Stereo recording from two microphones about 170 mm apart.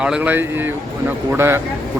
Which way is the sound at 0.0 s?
5° right (ahead or behind).